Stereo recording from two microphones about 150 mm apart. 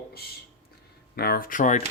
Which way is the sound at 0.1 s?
90° left.